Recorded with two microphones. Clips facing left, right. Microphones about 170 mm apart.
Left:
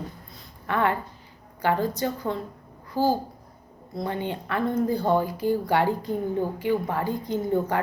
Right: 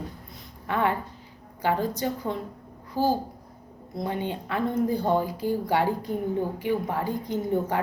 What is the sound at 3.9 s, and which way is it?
Speech, 15° right (ahead or behind).